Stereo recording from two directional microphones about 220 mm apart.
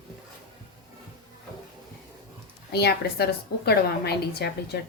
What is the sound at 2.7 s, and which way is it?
Speech, 50° left (ahead or behind).